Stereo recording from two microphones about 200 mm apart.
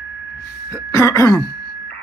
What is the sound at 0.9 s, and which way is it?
Throat clearing, 15° left (ahead or behind).